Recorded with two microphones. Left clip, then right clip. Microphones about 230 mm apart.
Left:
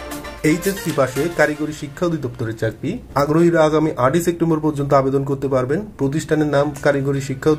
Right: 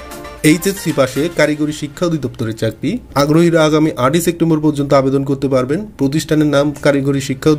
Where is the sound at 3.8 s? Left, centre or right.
Right.